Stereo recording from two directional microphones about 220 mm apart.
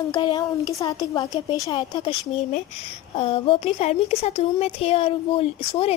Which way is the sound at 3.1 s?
25° left (ahead or behind).